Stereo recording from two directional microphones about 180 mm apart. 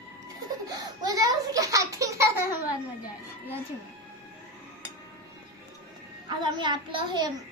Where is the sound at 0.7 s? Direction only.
20° right (ahead or behind).